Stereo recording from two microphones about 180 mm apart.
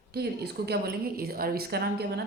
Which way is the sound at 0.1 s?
65° right (ahead or behind).